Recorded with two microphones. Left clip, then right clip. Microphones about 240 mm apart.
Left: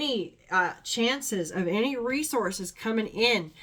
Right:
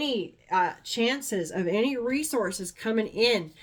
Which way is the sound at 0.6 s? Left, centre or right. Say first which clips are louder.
Even; centre.